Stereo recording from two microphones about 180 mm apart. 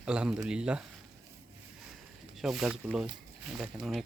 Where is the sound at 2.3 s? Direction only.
Centre (ahead or behind).